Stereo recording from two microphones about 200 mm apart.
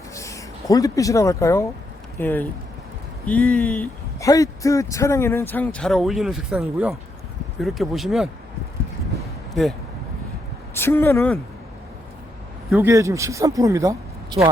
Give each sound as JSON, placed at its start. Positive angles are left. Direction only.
{"t": 0.1, "sound": "speech", "side_deg": 15}
{"t": 10.8, "sound": "speech", "side_deg": 10}
{"t": 12.7, "sound": "speech", "side_deg": -15}